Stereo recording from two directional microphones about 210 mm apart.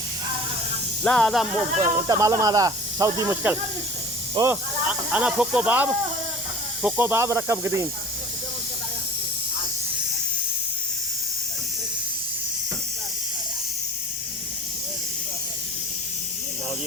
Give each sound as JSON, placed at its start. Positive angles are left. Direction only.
{"t": 1.0, "sound": "speech", "side_deg": 5}
{"t": 1.8, "sound": "speech", "side_deg": -15}